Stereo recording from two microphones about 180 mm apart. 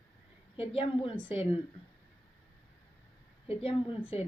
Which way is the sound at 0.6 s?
30° left (ahead or behind).